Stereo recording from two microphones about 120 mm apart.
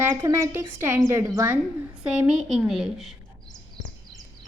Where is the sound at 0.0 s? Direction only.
25° right (ahead or behind).